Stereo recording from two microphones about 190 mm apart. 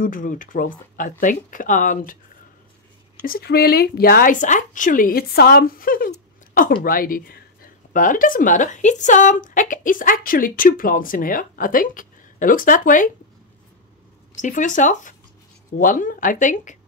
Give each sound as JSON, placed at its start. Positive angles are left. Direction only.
{"t": 0.0, "sound": "speech", "side_deg": 45}
{"t": 3.3, "sound": "speech", "side_deg": 55}
{"t": 14.4, "sound": "speech", "side_deg": 40}